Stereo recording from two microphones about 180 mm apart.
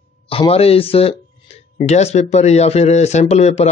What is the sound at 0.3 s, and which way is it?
Speech, 30° left (ahead or behind).